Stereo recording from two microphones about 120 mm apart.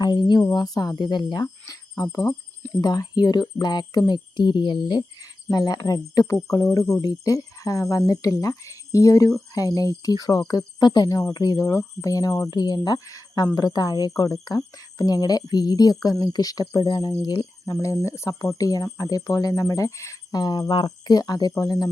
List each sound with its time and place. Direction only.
0.0 s speech: 35° left (ahead or behind)